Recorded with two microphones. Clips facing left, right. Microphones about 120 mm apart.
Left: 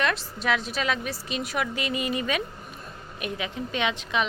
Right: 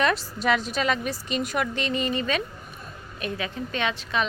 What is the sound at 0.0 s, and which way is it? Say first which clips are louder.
A woman's voice: right 3 dB; centre (ahead or behind).